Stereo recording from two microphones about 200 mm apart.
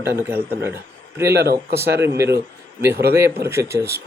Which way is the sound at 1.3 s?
55° right (ahead or behind).